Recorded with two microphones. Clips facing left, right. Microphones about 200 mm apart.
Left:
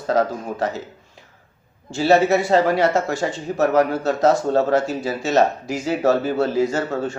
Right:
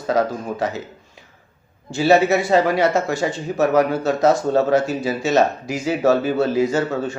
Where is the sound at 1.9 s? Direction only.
10° right (ahead or behind).